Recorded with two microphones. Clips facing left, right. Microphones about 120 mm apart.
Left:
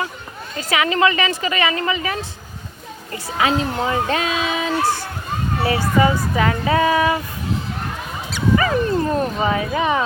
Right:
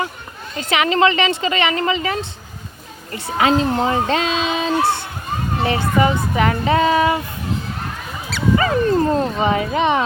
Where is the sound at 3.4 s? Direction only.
35° right (ahead or behind).